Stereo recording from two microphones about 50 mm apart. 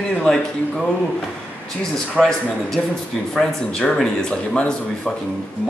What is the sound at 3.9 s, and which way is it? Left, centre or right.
Speech, centre.